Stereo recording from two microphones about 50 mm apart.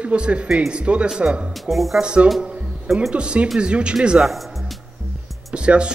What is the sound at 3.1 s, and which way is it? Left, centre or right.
A man's voice, right.